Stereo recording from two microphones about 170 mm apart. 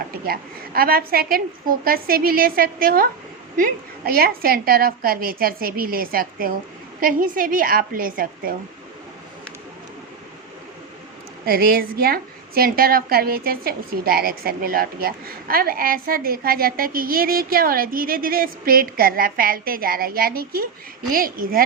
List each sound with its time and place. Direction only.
0.1 s a woman's voice: 60° right (ahead or behind)
11.4 s a woman's voice: 60° right (ahead or behind)